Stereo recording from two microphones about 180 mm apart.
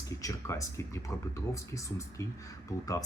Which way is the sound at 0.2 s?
20° left (ahead or behind).